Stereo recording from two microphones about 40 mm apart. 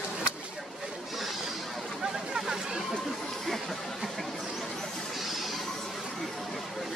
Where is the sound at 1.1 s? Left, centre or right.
Centre.